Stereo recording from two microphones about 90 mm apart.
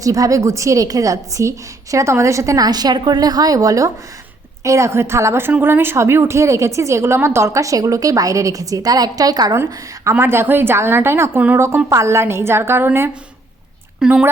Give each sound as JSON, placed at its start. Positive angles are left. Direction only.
{"t": 0.0, "sound": "a woman's voice", "side_deg": -40}
{"t": 9.6, "sound": "a woman's voice", "side_deg": -30}
{"t": 14.0, "sound": "speech", "side_deg": -5}